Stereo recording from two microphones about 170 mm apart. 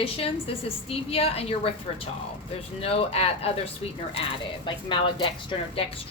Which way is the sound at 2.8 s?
35° left (ahead or behind).